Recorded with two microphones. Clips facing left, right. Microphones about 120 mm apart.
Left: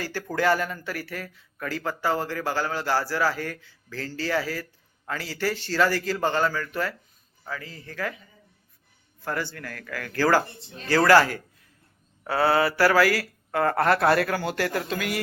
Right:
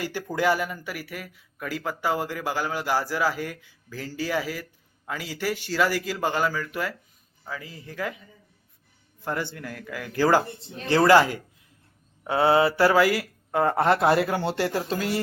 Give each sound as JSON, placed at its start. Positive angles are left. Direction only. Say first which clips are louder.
{"t": 0.0, "sound": "a man's voice", "louder": "even", "side_deg": -15}
{"t": 9.2, "sound": "a man's voice", "louder": "right 1 dB", "side_deg": -20}